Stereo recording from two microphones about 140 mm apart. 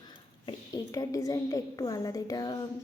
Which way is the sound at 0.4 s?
30° left (ahead or behind).